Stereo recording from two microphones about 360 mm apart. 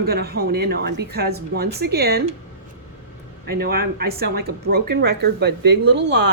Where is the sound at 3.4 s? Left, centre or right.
Right.